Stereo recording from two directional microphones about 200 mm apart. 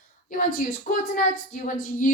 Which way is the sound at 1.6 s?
40° left (ahead or behind).